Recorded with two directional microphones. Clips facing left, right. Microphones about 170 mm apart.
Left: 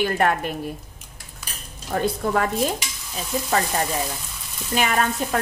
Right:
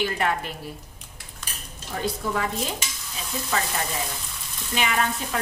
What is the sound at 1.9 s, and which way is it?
Speech, 55° left (ahead or behind).